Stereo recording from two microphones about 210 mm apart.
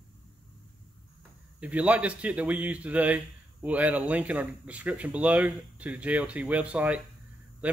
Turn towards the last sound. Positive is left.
turn(degrees=-5)  # may be behind; listen again after turning